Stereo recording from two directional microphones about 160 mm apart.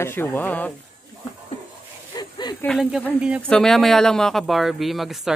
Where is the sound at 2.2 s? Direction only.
25° left (ahead or behind).